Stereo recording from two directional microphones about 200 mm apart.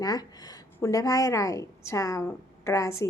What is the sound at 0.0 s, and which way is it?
A woman's voice, 20° left (ahead or behind).